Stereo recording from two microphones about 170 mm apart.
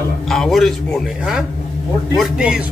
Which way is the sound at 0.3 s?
Centre (ahead or behind).